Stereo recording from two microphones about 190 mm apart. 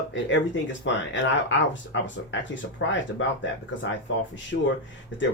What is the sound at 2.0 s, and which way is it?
Speech, 75° left (ahead or behind).